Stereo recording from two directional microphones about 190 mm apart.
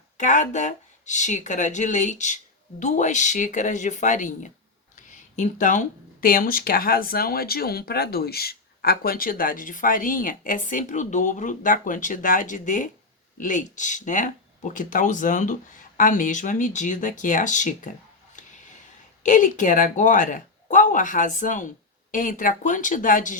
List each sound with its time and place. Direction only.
0.2 s speech: 40° left (ahead or behind)
19.2 s speech: 40° left (ahead or behind)